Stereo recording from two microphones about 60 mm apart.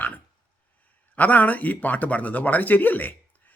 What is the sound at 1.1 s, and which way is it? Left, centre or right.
Speech, left.